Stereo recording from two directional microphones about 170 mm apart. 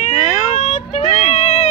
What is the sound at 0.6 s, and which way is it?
Child singing, 40° left (ahead or behind).